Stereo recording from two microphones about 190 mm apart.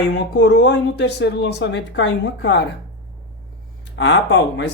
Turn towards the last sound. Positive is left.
turn(degrees=70)  # may be behind; listen again after turning